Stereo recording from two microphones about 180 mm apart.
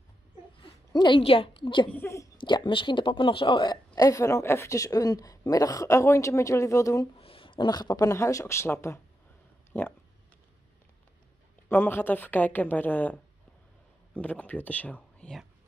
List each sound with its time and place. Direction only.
0.6 s a woman's voice: 25° left (ahead or behind)
1.9 s speech: 15° left (ahead or behind)
2.3 s a woman's voice: 25° left (ahead or behind)
7.2 s speech: 30° left (ahead or behind); by 8.7 s 15° left (ahead or behind)
9.7 s a sound: 10° left (ahead or behind)
11.7 s speech: 10° left (ahead or behind)